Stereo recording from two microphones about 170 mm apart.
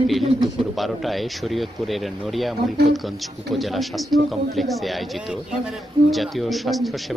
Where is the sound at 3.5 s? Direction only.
Centre (ahead or behind).